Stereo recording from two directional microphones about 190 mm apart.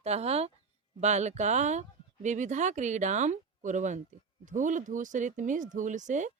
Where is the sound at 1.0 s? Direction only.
35° right (ahead or behind).